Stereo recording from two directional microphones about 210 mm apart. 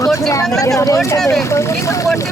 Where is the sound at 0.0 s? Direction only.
15° left (ahead or behind).